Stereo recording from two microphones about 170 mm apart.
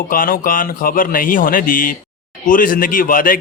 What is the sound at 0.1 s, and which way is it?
A man's voice, 55° left (ahead or behind).